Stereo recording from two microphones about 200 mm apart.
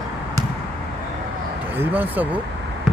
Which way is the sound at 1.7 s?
10° right (ahead or behind).